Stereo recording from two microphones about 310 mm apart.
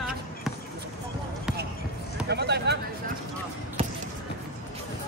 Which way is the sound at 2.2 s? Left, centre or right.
Right.